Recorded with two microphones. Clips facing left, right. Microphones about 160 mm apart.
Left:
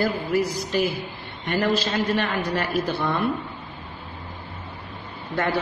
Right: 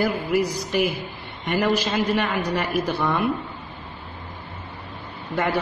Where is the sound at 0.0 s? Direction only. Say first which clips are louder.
Right 1 dB; 15° right (ahead or behind).